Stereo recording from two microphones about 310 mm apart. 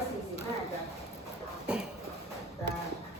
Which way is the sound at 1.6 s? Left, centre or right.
Centre.